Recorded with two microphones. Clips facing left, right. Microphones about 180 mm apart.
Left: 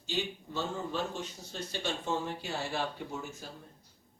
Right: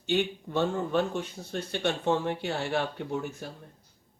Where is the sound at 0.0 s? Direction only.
60° right (ahead or behind).